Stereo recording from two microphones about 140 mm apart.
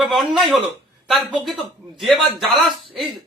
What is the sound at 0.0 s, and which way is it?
A man's voice, centre (ahead or behind).